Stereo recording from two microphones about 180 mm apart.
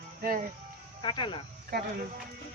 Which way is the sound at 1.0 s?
25° left (ahead or behind).